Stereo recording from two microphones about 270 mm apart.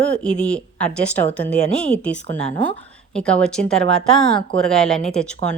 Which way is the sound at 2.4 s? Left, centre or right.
Centre.